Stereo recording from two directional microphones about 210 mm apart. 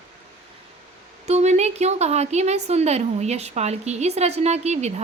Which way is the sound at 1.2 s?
30° right (ahead or behind).